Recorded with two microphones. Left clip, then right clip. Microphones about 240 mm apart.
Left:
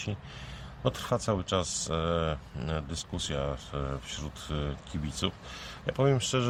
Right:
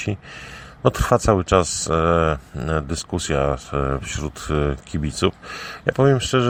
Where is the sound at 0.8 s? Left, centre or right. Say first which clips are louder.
Right 13 dB; right.